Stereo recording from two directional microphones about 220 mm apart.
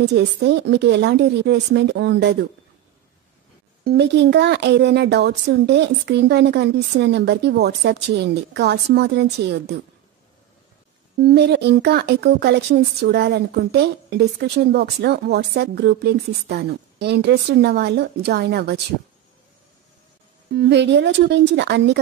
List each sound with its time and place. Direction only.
0.0 s speech: 50° right (ahead or behind)
3.8 s speech: 50° right (ahead or behind)
11.1 s speech: 45° right (ahead or behind)
20.5 s speech: 50° right (ahead or behind)